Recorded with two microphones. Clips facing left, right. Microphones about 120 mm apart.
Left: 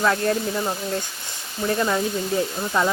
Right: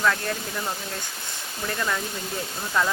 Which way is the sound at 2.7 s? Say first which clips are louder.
Left 3 dB; 20° left (ahead or behind).